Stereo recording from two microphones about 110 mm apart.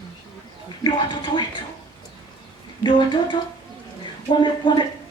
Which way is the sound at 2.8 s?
45° left (ahead or behind).